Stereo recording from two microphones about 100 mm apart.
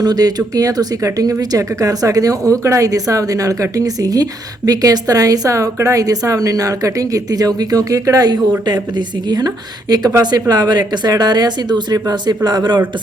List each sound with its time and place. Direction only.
0.0 s a woman's voice: 40° right (ahead or behind)